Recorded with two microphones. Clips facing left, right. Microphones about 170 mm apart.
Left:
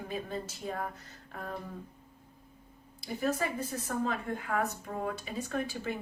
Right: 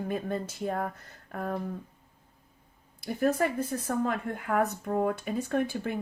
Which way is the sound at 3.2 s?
55° right (ahead or behind).